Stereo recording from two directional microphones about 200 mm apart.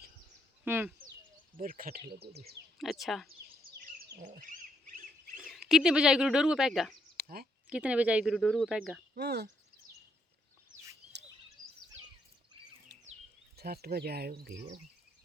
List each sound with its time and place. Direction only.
0.6 s speech: 10° right (ahead or behind)
1.5 s speech: 45° right (ahead or behind)
2.7 s speech: centre (ahead or behind)
3.8 s pig: 45° right (ahead or behind)
5.4 s speech: centre (ahead or behind)
7.2 s a sound: 50° right (ahead or behind)
7.7 s speech: 5° right (ahead or behind)
9.1 s speech: 55° right (ahead or behind)
13.6 s speech: 50° right (ahead or behind)